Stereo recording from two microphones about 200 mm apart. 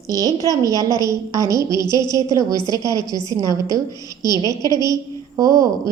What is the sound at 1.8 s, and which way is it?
Speech, 20° left (ahead or behind).